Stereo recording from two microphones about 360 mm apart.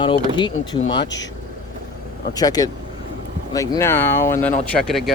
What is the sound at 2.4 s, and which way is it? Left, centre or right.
Speech, centre.